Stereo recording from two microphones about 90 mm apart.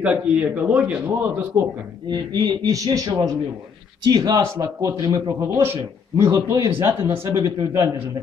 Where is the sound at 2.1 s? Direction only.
50° right (ahead or behind).